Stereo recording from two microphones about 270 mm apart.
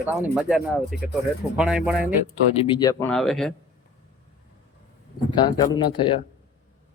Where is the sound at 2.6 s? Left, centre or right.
Centre.